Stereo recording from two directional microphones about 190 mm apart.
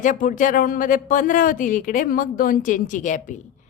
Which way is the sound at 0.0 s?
45° left (ahead or behind).